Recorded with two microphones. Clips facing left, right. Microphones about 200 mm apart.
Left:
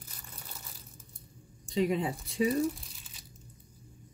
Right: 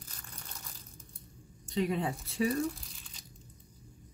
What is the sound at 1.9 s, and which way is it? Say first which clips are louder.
Speech: left 2 dB; 20° left (ahead or behind).